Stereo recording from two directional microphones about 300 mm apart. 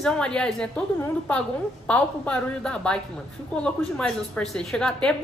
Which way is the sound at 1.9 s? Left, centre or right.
Centre.